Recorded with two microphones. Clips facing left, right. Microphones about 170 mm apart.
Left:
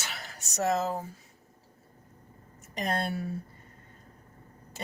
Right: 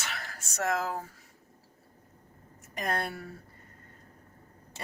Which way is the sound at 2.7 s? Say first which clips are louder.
Left 2 dB; 25° left (ahead or behind).